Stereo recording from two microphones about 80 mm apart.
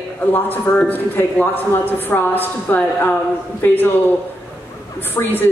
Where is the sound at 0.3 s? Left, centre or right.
Left.